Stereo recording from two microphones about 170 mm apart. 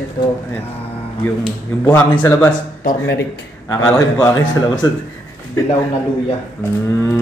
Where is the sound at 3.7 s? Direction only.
20° left (ahead or behind).